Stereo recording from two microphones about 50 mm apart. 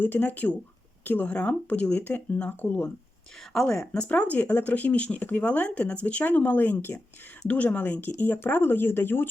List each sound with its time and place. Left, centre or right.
0.0 s speech: left
3.5 s a woman's voice: centre
3.9 s speech: left